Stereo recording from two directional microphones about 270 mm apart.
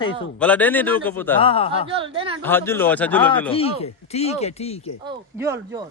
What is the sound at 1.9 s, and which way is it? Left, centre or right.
Speech, centre.